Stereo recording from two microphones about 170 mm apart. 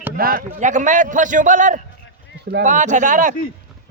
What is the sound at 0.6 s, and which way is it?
Speech, 45° right (ahead or behind).